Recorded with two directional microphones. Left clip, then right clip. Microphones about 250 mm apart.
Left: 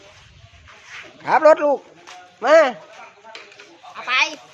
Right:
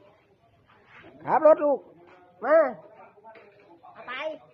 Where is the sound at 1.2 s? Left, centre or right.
Centre.